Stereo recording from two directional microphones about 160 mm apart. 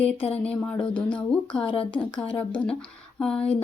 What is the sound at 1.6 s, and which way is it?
Speech, 35° left (ahead or behind).